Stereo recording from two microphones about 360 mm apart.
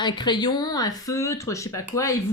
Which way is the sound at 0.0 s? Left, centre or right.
Centre.